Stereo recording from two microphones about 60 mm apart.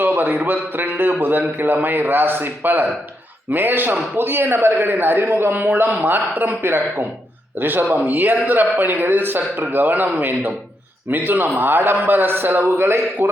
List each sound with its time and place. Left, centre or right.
0.0 s a man's voice: right